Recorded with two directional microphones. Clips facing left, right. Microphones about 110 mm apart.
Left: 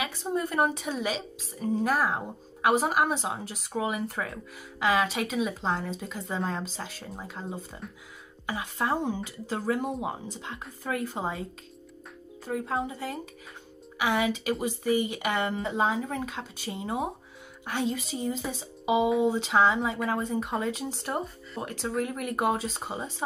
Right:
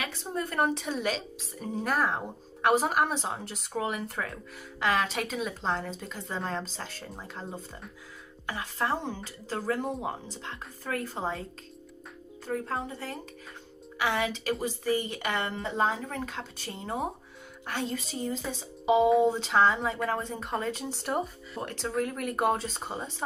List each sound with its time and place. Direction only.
0.0 s a woman's voice: 10° left (ahead or behind)
12.4 s a woman's voice: 10° left (ahead or behind)